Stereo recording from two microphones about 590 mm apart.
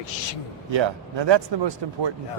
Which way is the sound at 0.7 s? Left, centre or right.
Right.